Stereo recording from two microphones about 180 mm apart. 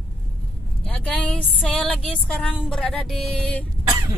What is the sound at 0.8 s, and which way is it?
Speech, 5° left (ahead or behind).